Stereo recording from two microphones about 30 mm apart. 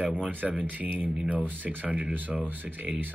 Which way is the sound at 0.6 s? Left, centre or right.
Right.